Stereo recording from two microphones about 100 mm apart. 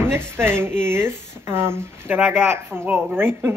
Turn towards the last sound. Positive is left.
turn(degrees=-25)  # may be behind; listen again after turning